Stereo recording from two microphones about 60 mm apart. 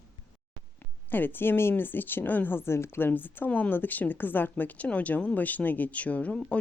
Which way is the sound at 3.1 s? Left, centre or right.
Left.